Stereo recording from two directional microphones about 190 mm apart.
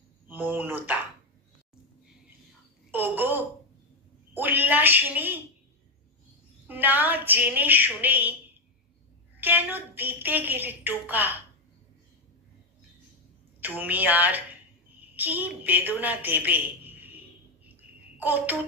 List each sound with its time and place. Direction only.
0.3 s speech: 10° right (ahead or behind)
2.9 s a sound: 10° right (ahead or behind)
6.7 s female singing: 10° right (ahead or behind)
9.4 s a woman's voice: 10° right (ahead or behind)
13.6 s a woman's voice: 10° right (ahead or behind)
18.1 s a child's voice: 10° right (ahead or behind)